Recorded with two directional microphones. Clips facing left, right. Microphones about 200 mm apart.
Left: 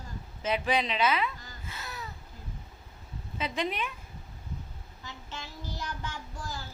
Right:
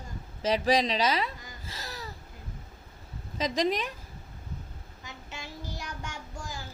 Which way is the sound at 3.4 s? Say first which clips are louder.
Right 5 dB; 40° right (ahead or behind).